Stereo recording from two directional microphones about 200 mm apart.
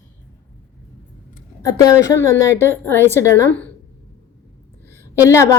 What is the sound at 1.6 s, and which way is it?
A woman's voice, 15° left (ahead or behind).